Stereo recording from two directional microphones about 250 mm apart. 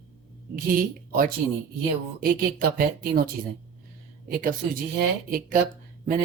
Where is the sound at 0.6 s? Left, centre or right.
Right.